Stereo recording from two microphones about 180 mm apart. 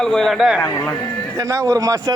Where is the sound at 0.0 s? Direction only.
Centre (ahead or behind).